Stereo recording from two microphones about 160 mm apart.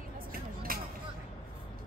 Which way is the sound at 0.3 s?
65° right (ahead or behind).